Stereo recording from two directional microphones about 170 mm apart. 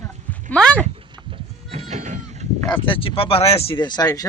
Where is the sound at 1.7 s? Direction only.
40° right (ahead or behind).